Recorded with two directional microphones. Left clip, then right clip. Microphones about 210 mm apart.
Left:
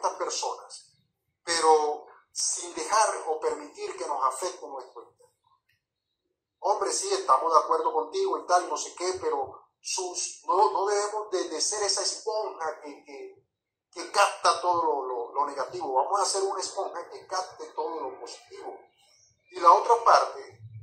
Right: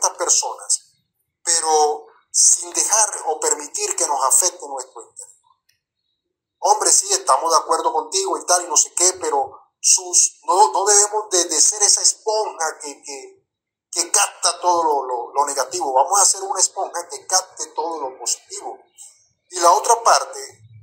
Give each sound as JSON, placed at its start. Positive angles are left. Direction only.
{"t": 0.0, "sound": "a sound", "side_deg": -40}
{"t": 1.4, "sound": "speech", "side_deg": -40}
{"t": 6.6, "sound": "speech", "side_deg": -40}
{"t": 19.5, "sound": "speech", "side_deg": -40}